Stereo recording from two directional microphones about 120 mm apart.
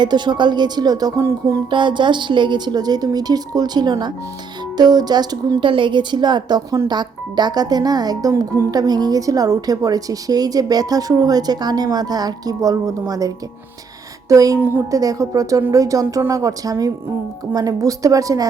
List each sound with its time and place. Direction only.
0.0 s a woman's voice: 40° right (ahead or behind)
1.7 s a woman's voice: 40° right (ahead or behind)